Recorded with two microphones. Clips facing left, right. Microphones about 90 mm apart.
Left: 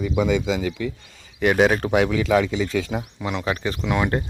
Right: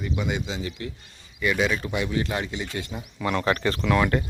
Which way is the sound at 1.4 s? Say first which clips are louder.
Left 6 dB; 55° left (ahead or behind).